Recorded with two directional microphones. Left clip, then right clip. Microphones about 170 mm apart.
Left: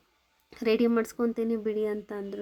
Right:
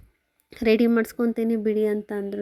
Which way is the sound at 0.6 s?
20° right (ahead or behind).